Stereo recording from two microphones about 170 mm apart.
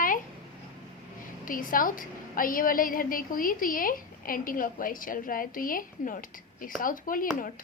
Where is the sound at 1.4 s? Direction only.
55° left (ahead or behind).